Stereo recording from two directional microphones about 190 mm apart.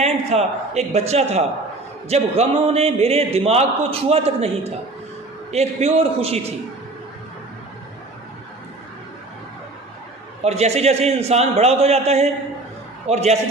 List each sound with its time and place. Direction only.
0.0 s a man's voice: 35° right (ahead or behind)
10.4 s a man's voice: 35° right (ahead or behind)